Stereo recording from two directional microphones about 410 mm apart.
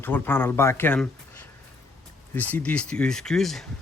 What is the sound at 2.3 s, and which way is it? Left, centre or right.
Speech, centre.